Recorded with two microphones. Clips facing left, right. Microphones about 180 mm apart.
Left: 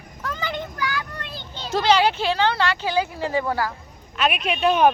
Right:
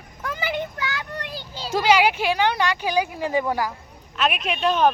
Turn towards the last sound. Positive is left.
turn(degrees=5)  # may be behind; listen again after turning